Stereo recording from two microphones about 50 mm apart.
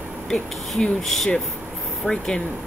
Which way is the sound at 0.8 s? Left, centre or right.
Centre.